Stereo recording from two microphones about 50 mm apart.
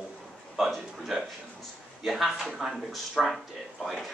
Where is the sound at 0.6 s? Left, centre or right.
Centre.